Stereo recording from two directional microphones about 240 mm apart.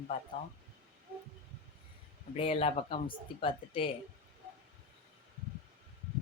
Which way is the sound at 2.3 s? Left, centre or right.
Left.